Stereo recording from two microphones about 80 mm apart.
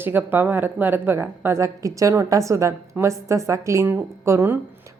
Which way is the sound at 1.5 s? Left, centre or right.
Right.